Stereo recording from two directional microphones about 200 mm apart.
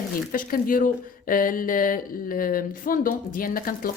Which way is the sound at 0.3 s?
45° left (ahead or behind).